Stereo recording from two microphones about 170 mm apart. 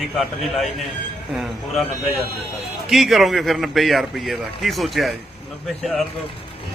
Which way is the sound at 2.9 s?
Centre (ahead or behind).